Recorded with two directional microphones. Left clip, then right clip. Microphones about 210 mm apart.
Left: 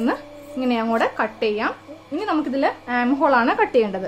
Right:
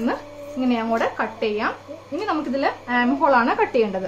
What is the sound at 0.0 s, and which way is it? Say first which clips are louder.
A woman's voice: left 1 dB; 45° left (ahead or behind).